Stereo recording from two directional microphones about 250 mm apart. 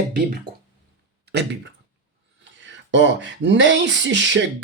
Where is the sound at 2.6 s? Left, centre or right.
Right.